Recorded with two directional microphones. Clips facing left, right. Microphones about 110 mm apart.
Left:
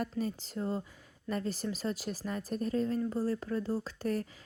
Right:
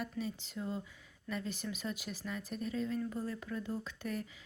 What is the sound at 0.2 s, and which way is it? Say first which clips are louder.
Speech: left 5 dB; 40° left (ahead or behind).